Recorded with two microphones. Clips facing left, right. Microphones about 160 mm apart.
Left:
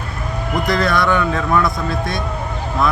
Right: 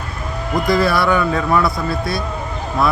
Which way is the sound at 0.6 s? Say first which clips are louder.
Right 2 dB; 5° right (ahead or behind).